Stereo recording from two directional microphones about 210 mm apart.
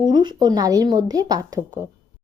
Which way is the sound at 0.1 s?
20° right (ahead or behind).